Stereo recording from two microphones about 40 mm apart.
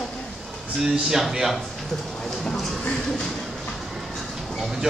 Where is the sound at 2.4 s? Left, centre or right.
Centre.